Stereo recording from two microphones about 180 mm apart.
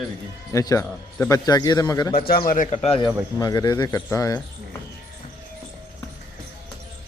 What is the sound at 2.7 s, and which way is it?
Speech, 30° left (ahead or behind).